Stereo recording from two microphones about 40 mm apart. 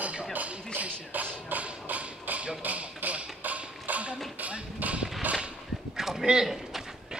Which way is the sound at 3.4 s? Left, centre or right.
Right.